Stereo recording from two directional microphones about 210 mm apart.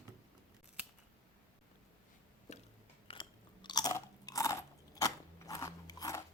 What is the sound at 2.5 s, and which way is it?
Biting, 30° left (ahead or behind).